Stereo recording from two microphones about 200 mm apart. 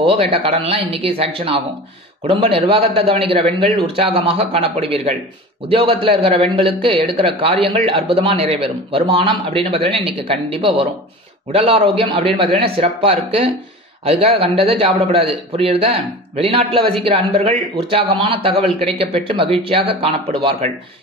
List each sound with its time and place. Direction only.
0.0 s a man's voice: 25° right (ahead or behind)